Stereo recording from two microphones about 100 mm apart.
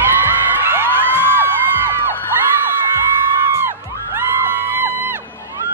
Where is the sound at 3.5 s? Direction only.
25° right (ahead or behind).